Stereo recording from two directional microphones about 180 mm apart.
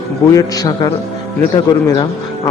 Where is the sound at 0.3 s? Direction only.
20° left (ahead or behind).